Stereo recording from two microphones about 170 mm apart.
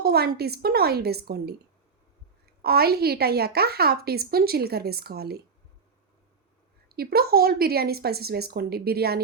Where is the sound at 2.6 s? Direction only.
65° right (ahead or behind).